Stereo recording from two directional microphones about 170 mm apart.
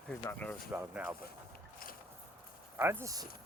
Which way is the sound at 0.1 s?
10° left (ahead or behind).